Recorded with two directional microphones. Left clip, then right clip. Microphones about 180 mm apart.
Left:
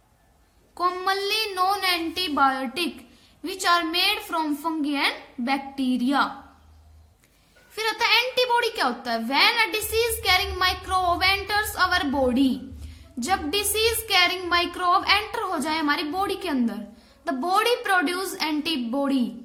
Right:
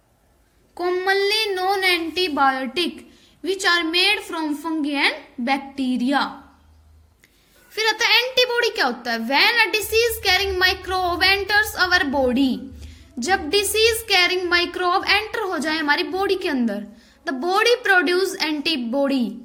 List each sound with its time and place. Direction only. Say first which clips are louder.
0.8 s a woman's voice: right 4 dB; 10° right (ahead or behind)
7.8 s a woman's voice: right 4 dB; 20° right (ahead or behind)